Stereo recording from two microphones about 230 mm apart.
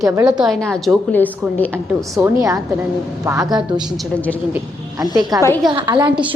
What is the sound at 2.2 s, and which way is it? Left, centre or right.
A woman's voice, centre.